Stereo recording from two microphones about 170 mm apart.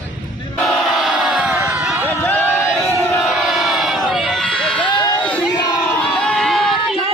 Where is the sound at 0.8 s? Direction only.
Centre (ahead or behind).